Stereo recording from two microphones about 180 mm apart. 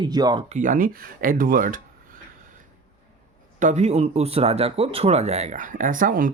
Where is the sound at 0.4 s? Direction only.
45° right (ahead or behind).